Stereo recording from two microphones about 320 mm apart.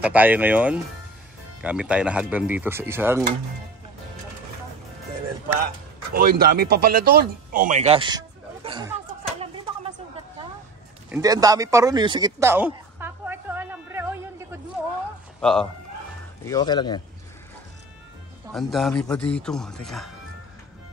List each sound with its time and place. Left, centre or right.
0.0 s speech: centre
6.1 s speech: right; by 8.9 s centre
11.1 s a sound: centre
15.4 s speech: centre
16.4 s speech: centre
18.5 s speech: centre